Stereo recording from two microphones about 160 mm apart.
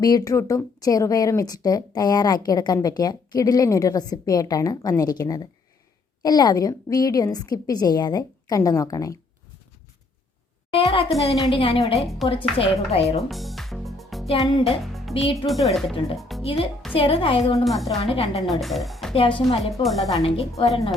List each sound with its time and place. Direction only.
0.0 s a woman's voice: 25° left (ahead or behind)
10.7 s a child's voice: 35° left (ahead or behind)
11.9 s speech: centre (ahead or behind)
12.3 s a woman's voice: 35° left (ahead or behind)
13.2 s music: centre (ahead or behind)
15.1 s a woman's voice: 35° left (ahead or behind)
15.4 s speech: centre (ahead or behind)
16.4 s a child's voice: 40° left (ahead or behind)
17.6 s speech: centre (ahead or behind)
18.0 s a woman's voice: 35° left (ahead or behind)
18.4 s speech: centre (ahead or behind)
19.1 s a woman's voice: 35° left (ahead or behind)
19.8 s speech: centre (ahead or behind)
20.1 s a woman's voice: 30° left (ahead or behind)